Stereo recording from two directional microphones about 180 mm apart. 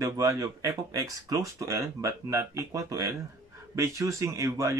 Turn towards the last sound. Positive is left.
turn(degrees=-15)  # may be behind; listen again after turning